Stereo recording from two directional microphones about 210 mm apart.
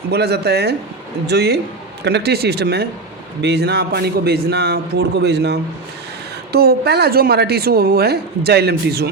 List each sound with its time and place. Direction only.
0.1 s a woman's voice: 50° right (ahead or behind)